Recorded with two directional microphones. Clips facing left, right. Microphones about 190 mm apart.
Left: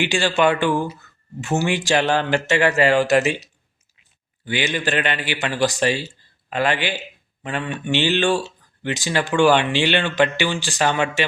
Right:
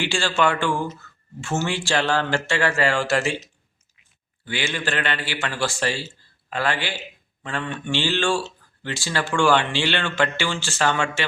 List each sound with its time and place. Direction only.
0.0 s a man's voice: 15° left (ahead or behind)